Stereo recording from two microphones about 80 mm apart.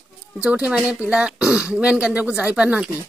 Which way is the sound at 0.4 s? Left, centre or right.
Centre.